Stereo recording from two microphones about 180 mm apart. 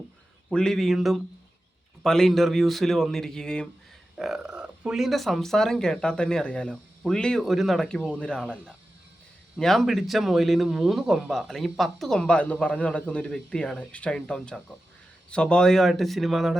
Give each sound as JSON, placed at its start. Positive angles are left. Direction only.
{"t": 0.5, "sound": "speech", "side_deg": 5}